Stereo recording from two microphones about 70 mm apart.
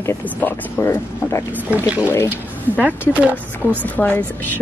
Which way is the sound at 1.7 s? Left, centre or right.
Centre.